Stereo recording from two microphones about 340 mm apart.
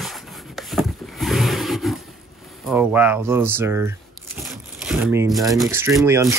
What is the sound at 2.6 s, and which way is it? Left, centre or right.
Speech, centre.